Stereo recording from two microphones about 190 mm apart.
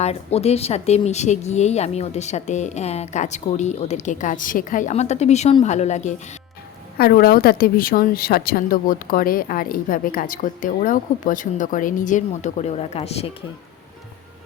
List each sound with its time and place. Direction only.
0.0 s speech: 35° left (ahead or behind)
7.0 s a woman's voice: 50° left (ahead or behind); by 13.3 s 30° left (ahead or behind)